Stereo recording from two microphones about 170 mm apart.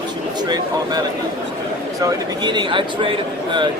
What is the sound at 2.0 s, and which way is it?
Speech, 25° right (ahead or behind).